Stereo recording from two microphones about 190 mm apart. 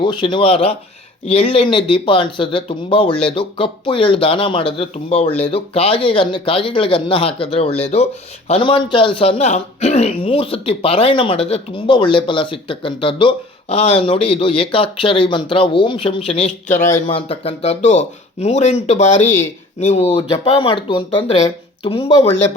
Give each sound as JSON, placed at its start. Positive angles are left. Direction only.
{"t": 0.0, "sound": "speech", "side_deg": 25}
{"t": 17.1, "sound": "speech", "side_deg": 30}